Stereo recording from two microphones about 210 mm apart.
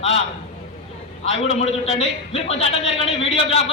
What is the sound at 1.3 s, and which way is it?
A man's voice, 30° left (ahead or behind).